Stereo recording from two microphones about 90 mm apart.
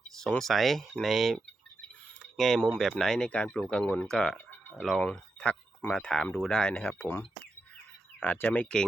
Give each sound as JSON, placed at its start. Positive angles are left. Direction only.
{"t": 0.2, "sound": "speech", "side_deg": 5}
{"t": 8.2, "sound": "speech", "side_deg": 20}